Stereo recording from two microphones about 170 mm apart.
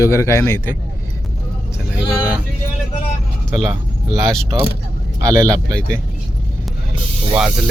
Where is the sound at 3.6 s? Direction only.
25° right (ahead or behind).